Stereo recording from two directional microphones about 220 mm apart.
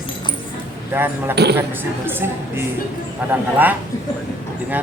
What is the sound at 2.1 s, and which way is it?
Speech, 10° right (ahead or behind).